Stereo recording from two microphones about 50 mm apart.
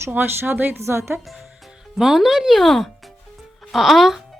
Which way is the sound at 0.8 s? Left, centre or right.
Right.